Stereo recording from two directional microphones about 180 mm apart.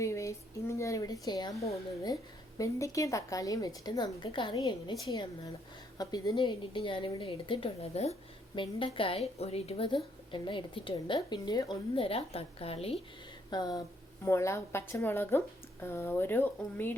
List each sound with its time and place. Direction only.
0.0 s a woman's voice: 15° left (ahead or behind)
6.0 s a woman's voice: 20° left (ahead or behind)
13.5 s a woman's voice: 20° left (ahead or behind)